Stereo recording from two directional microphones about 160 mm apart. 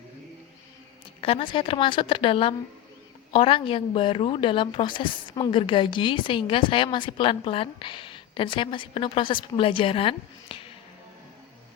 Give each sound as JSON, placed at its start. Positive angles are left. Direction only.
{"t": 1.2, "sound": "speech", "side_deg": 35}